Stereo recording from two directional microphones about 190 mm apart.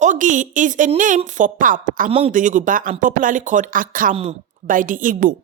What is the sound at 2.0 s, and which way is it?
Speech, 30° right (ahead or behind).